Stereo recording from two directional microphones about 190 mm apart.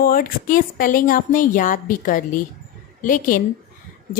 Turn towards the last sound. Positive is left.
turn(degrees=45)  # may be behind; listen again after turning